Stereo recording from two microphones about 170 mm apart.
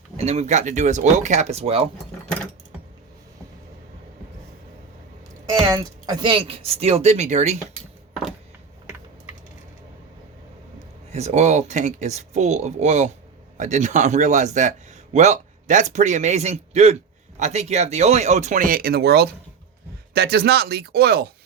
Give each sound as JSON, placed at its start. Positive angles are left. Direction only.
{"t": 0.2, "sound": "a man's voice", "side_deg": -40}
{"t": 5.6, "sound": "speech", "side_deg": -20}
{"t": 11.1, "sound": "a man's voice", "side_deg": -40}